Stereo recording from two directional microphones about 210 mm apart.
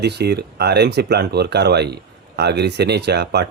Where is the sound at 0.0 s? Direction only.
50° right (ahead or behind).